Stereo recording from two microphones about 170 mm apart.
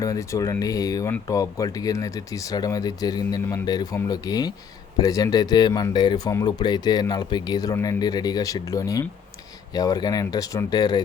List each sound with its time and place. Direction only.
0.0 s speech: 20° left (ahead or behind)